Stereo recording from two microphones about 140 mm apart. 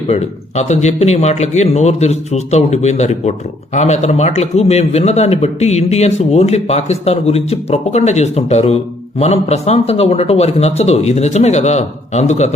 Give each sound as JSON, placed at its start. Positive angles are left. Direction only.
{"t": 0.1, "sound": "a man's voice", "side_deg": 55}